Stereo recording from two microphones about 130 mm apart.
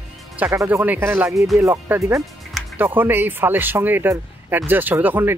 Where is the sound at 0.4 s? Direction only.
15° right (ahead or behind).